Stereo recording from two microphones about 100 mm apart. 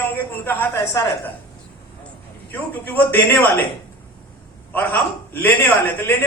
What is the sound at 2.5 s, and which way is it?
A man's voice, 20° left (ahead or behind).